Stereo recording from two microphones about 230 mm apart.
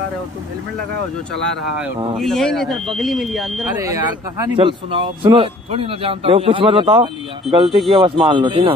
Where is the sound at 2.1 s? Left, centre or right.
Centre.